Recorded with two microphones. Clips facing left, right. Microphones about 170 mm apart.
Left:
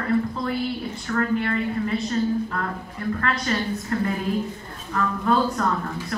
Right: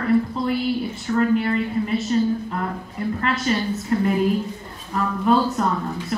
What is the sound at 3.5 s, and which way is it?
A woman's voice, 20° right (ahead or behind).